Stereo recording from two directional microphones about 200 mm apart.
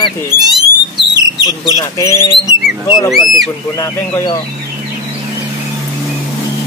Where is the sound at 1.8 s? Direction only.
15° left (ahead or behind).